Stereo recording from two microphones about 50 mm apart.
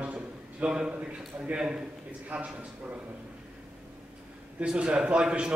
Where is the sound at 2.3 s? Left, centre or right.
Right.